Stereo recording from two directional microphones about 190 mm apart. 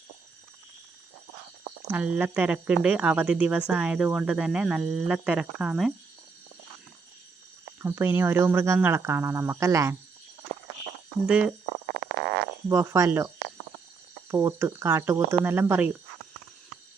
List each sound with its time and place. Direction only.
1.9 s speech: 10° right (ahead or behind)
7.8 s speech: 10° right (ahead or behind)
11.3 s speech: 5° right (ahead or behind)
11.9 s a sound: 70° right (ahead or behind)
12.6 s speech: 15° right (ahead or behind)